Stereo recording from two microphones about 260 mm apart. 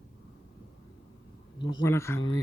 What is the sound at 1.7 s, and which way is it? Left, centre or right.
Speech, centre.